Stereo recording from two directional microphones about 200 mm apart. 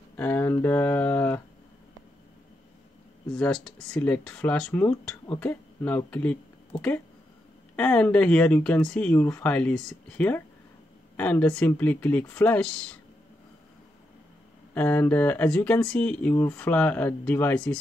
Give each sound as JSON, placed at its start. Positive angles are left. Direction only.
{"t": 0.2, "sound": "speech", "side_deg": 10}
{"t": 3.3, "sound": "speech", "side_deg": 5}
{"t": 6.7, "sound": "speech", "side_deg": 30}
{"t": 7.7, "sound": "speech", "side_deg": 5}
{"t": 14.7, "sound": "speech", "side_deg": 10}